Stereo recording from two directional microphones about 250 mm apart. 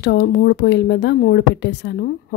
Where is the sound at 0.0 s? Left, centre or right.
Left.